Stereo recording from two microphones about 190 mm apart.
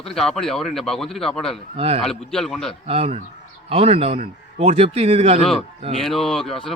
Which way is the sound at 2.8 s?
30° right (ahead or behind).